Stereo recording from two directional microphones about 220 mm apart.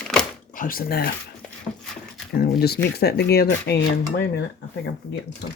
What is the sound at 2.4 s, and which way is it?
Dishes, 45° left (ahead or behind).